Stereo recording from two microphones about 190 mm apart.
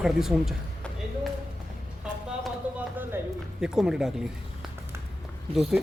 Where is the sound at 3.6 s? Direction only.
5° right (ahead or behind).